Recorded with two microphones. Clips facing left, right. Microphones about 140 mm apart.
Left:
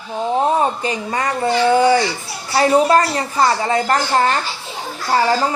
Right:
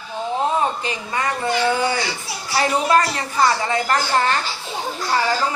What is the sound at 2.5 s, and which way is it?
Speech, 35° left (ahead or behind).